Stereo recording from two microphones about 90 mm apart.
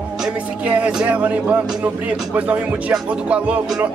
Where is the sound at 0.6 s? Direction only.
15° right (ahead or behind).